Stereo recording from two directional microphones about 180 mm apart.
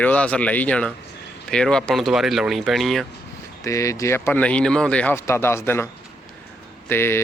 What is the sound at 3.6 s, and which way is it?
Speech, 15° left (ahead or behind).